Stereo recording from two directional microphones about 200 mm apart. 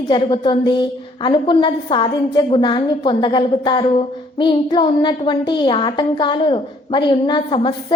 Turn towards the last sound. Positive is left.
turn(degrees=25)  # may be behind; listen again after turning